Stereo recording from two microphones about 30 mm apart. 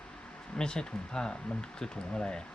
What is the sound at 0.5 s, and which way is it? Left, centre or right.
Speech, left.